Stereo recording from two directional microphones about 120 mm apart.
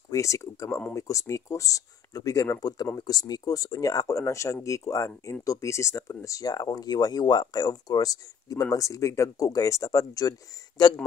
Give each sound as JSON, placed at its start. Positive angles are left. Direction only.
{"t": 0.1, "sound": "speech", "side_deg": 25}